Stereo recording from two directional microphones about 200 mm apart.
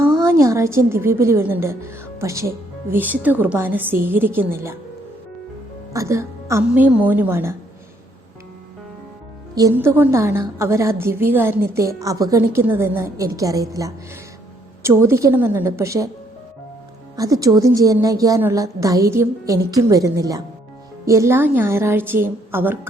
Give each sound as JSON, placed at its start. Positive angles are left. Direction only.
{"t": 0.0, "sound": "a woman's voice", "side_deg": -15}
{"t": 5.9, "sound": "a woman's voice", "side_deg": -15}
{"t": 9.6, "sound": "a woman's voice", "side_deg": -15}
{"t": 17.2, "sound": "a woman's voice", "side_deg": -15}